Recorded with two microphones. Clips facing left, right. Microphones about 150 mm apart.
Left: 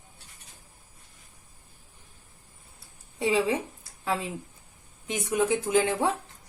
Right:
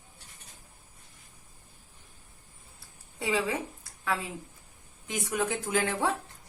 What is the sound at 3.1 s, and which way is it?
Speech, 25° left (ahead or behind).